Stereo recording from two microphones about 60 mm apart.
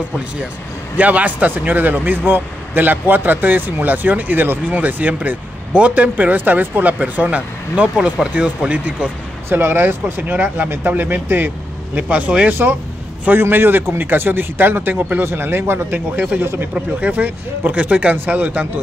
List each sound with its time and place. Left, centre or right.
0.9 s speech: right
9.5 s speech: right
13.2 s speech: right
15.9 s speech: right